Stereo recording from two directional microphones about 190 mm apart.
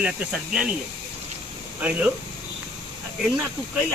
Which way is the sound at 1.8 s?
5° right (ahead or behind).